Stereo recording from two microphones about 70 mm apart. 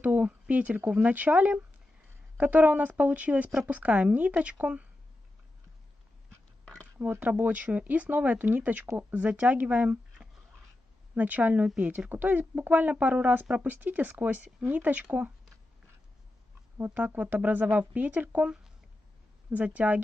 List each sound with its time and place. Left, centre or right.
0.0 s a woman's voice: right
7.2 s a woman's voice: right
16.7 s a woman's voice: right
19.5 s a woman's voice: right